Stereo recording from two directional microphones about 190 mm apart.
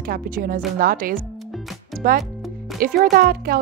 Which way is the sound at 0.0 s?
50° right (ahead or behind).